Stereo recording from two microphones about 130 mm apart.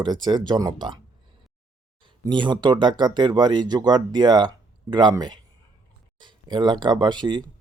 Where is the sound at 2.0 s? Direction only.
35° right (ahead or behind).